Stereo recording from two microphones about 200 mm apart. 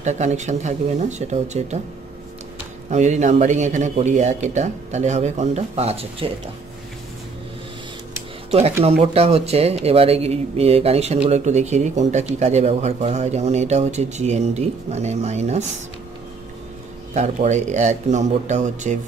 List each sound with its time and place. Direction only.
0.0 s speech: 35° right (ahead or behind)
2.9 s speech: 35° right (ahead or behind)
8.5 s speech: 30° right (ahead or behind)
17.1 s speech: 35° right (ahead or behind)